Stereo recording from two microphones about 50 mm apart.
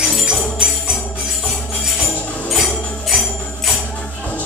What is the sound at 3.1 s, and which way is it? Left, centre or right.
Music, centre.